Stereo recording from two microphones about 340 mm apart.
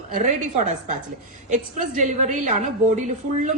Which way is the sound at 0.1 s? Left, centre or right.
Right.